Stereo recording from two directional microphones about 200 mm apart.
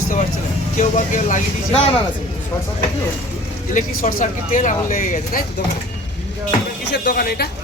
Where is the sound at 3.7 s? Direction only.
40° left (ahead or behind).